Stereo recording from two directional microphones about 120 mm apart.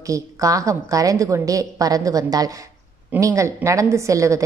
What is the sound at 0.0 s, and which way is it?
A woman's voice, 25° right (ahead or behind).